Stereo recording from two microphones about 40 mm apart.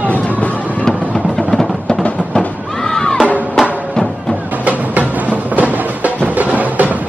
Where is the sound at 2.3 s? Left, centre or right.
Centre.